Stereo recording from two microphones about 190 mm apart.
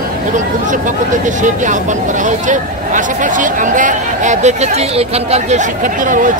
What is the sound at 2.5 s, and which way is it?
Speech, 45° right (ahead or behind).